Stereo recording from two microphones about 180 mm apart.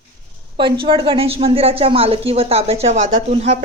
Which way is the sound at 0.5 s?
30° right (ahead or behind).